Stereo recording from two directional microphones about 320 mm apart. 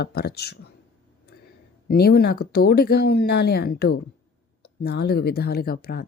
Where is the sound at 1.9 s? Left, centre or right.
Left.